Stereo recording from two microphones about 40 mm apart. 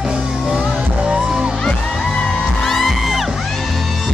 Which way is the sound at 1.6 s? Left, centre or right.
Centre.